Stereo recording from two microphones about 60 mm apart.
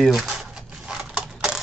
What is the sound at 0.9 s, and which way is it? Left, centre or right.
Typewriter, centre.